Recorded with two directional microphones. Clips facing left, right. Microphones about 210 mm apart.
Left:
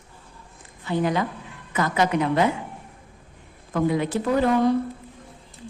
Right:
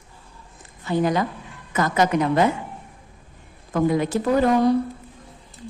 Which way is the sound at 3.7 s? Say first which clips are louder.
Right 2 dB; 45° right (ahead or behind).